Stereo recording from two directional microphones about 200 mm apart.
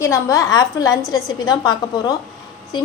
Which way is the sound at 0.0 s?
15° left (ahead or behind).